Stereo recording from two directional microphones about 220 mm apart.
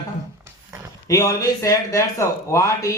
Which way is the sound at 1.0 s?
15° left (ahead or behind).